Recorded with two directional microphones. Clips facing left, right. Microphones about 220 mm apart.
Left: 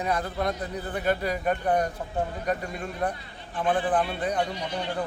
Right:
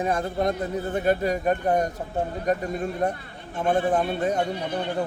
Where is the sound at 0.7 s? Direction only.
45° right (ahead or behind).